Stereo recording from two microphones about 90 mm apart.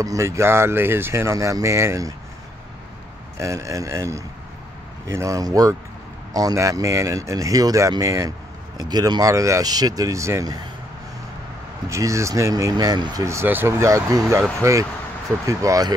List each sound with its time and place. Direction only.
0.0 s speech: 35° right (ahead or behind)
3.3 s speech: 35° right (ahead or behind)
8.7 s speech: 45° right (ahead or behind)
11.9 s speech: 35° right (ahead or behind)
12.7 s speech: 50° right (ahead or behind)
13.2 s speech: 30° right (ahead or behind)